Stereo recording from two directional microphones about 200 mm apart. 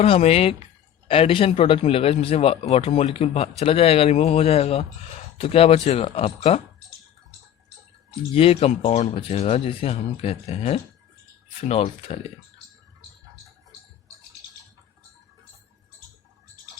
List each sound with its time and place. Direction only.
0.0 s a man's voice: 30° left (ahead or behind)
8.3 s a man's voice: 30° left (ahead or behind)